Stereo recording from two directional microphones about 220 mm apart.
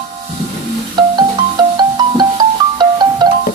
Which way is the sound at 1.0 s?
20° right (ahead or behind).